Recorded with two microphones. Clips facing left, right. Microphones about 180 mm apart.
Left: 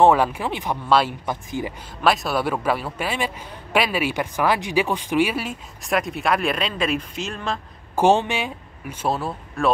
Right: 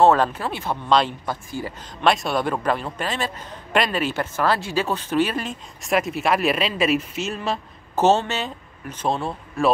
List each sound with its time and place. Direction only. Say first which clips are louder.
0.0 s a man's voice: even; 10° left (ahead or behind)
1.2 s a man's voice: left 2 dB; 20° left (ahead or behind)
2.0 s a man's voice: even; 5° left (ahead or behind)
7.9 s speech: left 1 dB; 15° left (ahead or behind)